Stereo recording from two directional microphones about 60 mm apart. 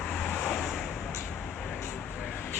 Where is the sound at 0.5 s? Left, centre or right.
Centre.